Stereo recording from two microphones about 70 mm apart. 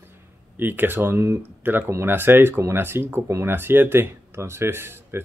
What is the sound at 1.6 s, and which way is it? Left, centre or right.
Speech, right.